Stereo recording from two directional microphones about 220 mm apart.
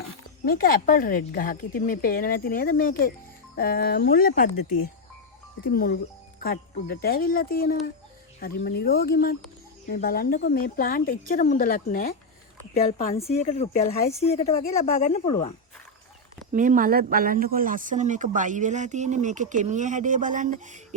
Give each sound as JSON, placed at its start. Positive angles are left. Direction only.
{"t": 0.4, "sound": "a woman's voice", "side_deg": 40}
{"t": 5.6, "sound": "a woman's voice", "side_deg": 45}
{"t": 16.5, "sound": "speech", "side_deg": -35}